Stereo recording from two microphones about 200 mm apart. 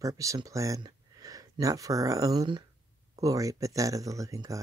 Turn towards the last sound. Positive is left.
turn(degrees=-15)  # may be behind; listen again after turning